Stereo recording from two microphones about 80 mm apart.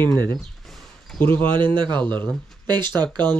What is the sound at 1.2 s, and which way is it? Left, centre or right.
Speech, left.